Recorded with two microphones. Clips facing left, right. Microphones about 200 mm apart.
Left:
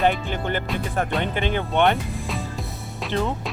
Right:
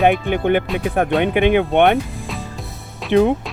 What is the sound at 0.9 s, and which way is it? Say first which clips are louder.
Speech: right 9 dB; 60° right (ahead or behind).